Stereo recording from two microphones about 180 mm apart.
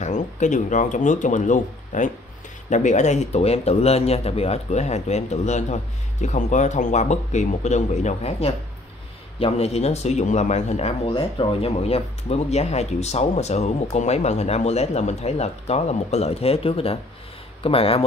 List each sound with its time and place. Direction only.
0.0 s speech: 40° left (ahead or behind)